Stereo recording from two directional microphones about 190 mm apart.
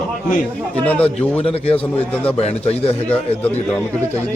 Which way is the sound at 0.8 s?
5° left (ahead or behind).